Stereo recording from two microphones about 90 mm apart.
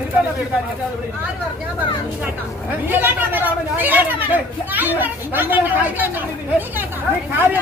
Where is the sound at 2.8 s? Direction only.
20° right (ahead or behind).